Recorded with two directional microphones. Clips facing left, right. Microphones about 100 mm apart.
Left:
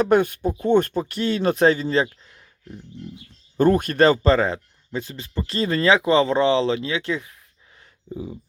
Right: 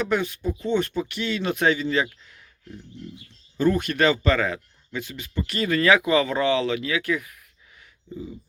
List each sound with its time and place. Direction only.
0.0 s speech: 50° left (ahead or behind); by 2.4 s 30° left (ahead or behind)
3.6 s speech: 45° left (ahead or behind); by 7.3 s 25° left (ahead or behind)
8.1 s speech: 55° left (ahead or behind)